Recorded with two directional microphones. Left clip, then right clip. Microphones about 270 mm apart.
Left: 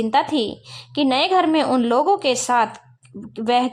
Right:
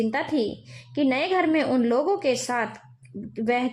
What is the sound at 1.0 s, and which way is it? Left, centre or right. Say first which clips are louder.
A woman's voice: left 6 dB; centre.